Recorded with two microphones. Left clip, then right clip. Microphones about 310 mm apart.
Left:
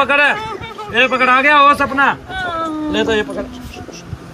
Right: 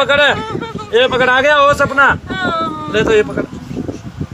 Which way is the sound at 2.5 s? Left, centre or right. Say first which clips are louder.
Right 1 dB; centre.